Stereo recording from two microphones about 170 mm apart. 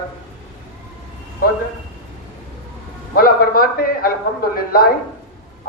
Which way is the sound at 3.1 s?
60° left (ahead or behind).